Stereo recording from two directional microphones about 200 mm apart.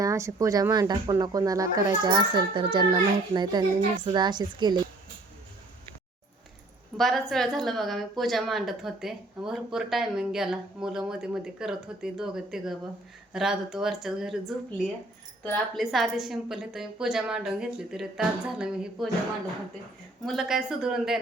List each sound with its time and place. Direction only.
0.0 s speech: 15° right (ahead or behind)
6.9 s a woman's voice: centre (ahead or behind)
15.4 s a woman's voice: centre (ahead or behind)
20.2 s a woman's voice: centre (ahead or behind)